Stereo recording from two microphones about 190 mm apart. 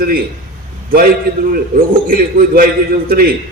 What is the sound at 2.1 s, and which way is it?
Speech, 50° right (ahead or behind).